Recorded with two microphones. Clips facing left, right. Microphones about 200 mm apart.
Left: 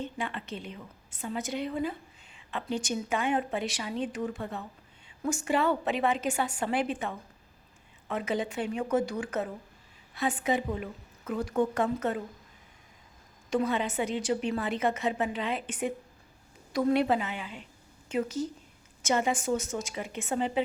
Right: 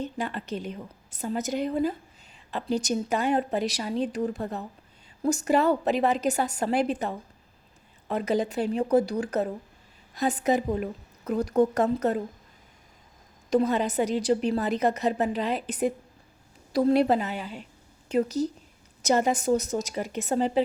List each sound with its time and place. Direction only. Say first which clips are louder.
0.0 s a woman's voice: right 4 dB; 40° right (ahead or behind)
13.5 s a woman's voice: right 5 dB; 40° right (ahead or behind)